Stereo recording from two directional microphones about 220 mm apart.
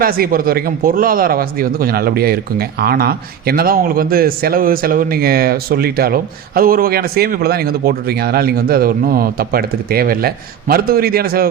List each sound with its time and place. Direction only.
0.0 s speech: 40° right (ahead or behind)